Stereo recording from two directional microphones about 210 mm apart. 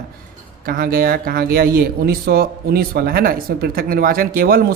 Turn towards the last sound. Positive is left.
turn(degrees=-45)  # may be behind; listen again after turning